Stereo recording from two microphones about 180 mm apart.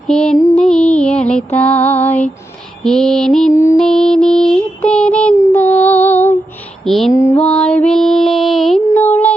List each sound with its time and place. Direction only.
0.1 s female singing: 5° left (ahead or behind)
0.5 s music: 5° left (ahead or behind)
2.8 s female singing: 5° left (ahead or behind)
3.5 s music: 15° left (ahead or behind)
3.8 s music: 5° left (ahead or behind)
6.8 s female singing: centre (ahead or behind)
7.1 s female singing: 10° left (ahead or behind)